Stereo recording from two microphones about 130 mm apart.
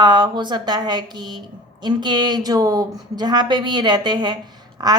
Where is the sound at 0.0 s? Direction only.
35° right (ahead or behind).